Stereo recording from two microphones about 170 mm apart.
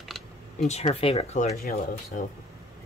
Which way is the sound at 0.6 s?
40° left (ahead or behind).